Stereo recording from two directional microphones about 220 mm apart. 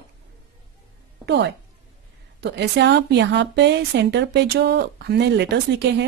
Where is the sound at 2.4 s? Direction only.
50° right (ahead or behind).